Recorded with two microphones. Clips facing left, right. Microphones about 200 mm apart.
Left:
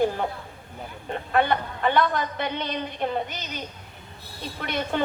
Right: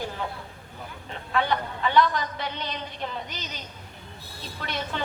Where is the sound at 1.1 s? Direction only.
55° left (ahead or behind).